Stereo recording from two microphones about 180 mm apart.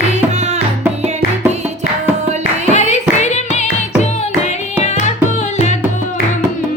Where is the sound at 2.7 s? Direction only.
40° left (ahead or behind).